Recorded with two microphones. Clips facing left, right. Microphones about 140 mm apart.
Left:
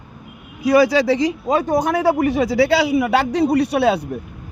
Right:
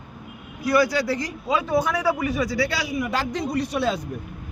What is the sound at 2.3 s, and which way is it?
A man's voice, 75° left (ahead or behind).